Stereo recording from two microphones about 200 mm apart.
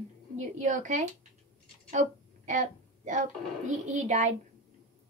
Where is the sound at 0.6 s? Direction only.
40° right (ahead or behind).